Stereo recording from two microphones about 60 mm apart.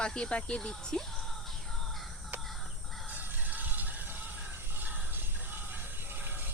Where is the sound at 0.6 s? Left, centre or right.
Centre.